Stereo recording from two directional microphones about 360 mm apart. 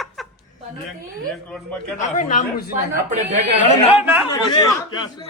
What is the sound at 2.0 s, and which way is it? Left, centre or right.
Speech, centre.